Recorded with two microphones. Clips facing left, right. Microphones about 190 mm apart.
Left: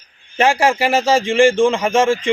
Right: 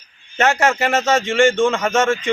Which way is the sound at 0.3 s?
30° left (ahead or behind).